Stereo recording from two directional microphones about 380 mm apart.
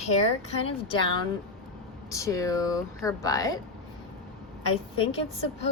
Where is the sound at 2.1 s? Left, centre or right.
Centre.